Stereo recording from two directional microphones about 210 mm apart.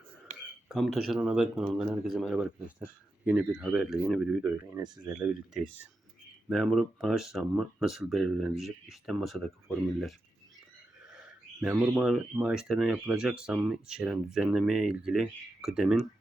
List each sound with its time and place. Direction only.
0.3 s a sound: 30° right (ahead or behind)
0.7 s speech: centre (ahead or behind); by 5.1 s 15° right (ahead or behind)
6.5 s speech: centre (ahead or behind)